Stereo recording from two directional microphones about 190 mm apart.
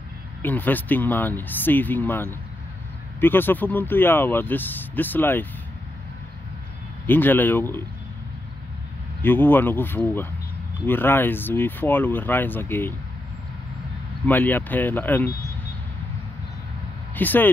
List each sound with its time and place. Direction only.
0.4 s speech: 10° left (ahead or behind)
7.1 s speech: 10° left (ahead or behind)
9.2 s speech: 10° left (ahead or behind)
14.2 s speech: 10° left (ahead or behind)
17.1 s speech: 10° left (ahead or behind)